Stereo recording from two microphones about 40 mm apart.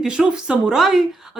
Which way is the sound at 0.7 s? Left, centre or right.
Centre.